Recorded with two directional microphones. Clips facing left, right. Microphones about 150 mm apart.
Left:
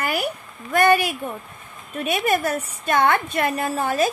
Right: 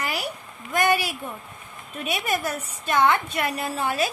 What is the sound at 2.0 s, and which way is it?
A woman's voice, 55° left (ahead or behind).